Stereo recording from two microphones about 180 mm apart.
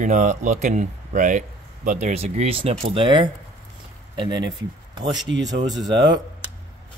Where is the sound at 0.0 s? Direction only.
45° right (ahead or behind); by 4.6 s 25° right (ahead or behind).